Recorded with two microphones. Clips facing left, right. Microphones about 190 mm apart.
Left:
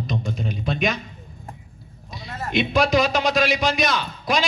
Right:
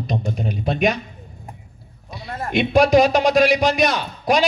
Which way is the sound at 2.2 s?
55° right (ahead or behind).